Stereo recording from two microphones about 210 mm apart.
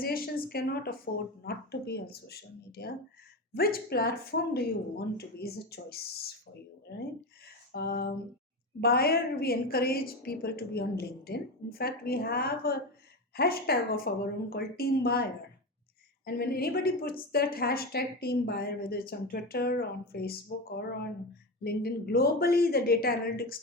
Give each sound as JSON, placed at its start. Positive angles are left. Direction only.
{"t": 0.0, "sound": "a woman's voice", "side_deg": 45}
{"t": 7.4, "sound": "a sound", "side_deg": 50}
{"t": 8.8, "sound": "a woman's voice", "side_deg": 45}